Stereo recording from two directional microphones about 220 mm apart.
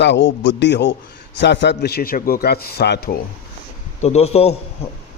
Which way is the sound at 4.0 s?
30° left (ahead or behind).